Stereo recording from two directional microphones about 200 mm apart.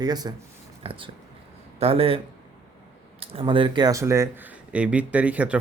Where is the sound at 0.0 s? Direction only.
20° right (ahead or behind).